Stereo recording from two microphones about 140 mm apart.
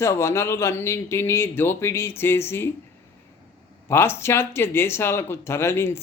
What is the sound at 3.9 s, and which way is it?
Speech, 15° left (ahead or behind).